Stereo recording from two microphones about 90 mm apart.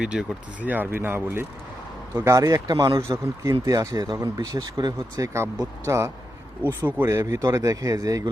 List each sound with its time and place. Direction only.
0.0 s speech: 10° right (ahead or behind); by 4.9 s 50° right (ahead or behind)
5.1 s speech: 35° right (ahead or behind)
6.6 s speech: 20° left (ahead or behind)
7.0 s speech: 30° right (ahead or behind)